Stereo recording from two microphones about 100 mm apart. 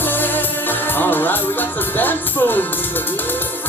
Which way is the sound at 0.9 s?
20° left (ahead or behind).